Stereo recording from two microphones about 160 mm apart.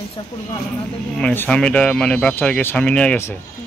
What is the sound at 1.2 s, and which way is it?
Speech, 5° left (ahead or behind).